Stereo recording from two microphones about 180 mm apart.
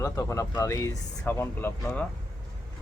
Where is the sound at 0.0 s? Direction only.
15° left (ahead or behind).